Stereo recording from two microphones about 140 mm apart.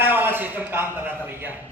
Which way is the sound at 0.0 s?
15° right (ahead or behind).